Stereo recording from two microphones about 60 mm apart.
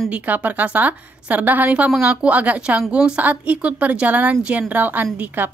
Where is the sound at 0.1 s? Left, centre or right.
Right.